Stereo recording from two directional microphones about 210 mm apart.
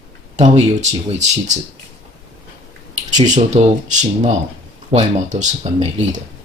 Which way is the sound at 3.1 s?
35° right (ahead or behind).